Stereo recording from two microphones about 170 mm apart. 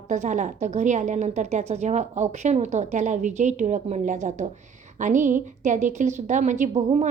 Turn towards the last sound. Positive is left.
turn(degrees=-45)  # may be behind; listen again after turning